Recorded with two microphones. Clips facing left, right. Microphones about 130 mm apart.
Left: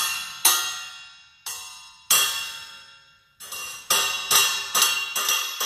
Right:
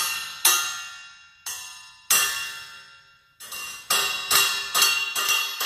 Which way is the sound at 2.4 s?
15° left (ahead or behind).